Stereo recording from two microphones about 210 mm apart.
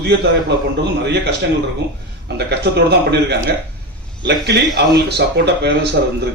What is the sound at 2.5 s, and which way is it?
Speech, 50° right (ahead or behind).